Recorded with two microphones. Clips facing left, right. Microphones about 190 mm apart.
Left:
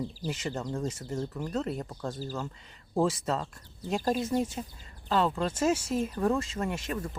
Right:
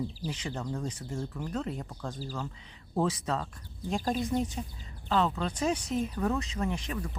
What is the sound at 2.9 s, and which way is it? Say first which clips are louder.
Speech: left 2 dB; 5° left (ahead or behind).